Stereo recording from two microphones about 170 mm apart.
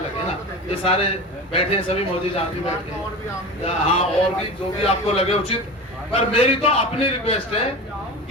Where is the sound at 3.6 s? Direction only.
35° left (ahead or behind).